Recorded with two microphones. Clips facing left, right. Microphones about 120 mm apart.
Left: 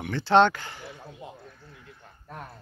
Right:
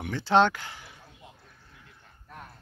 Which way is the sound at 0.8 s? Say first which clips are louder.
Left 9 dB; 65° left (ahead or behind).